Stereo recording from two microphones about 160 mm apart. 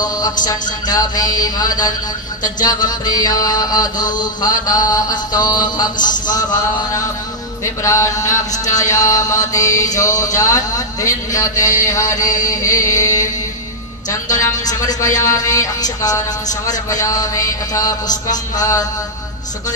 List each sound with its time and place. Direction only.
0.0 s music: 25° left (ahead or behind)
0.5 s mantra: 25° left (ahead or behind)
5.9 s a man's voice: 55° left (ahead or behind)
7.6 s mantra: 20° left (ahead or behind)
14.7 s mantra: 20° left (ahead or behind)
18.0 s mantra: 50° left (ahead or behind)
18.6 s mantra: 25° left (ahead or behind)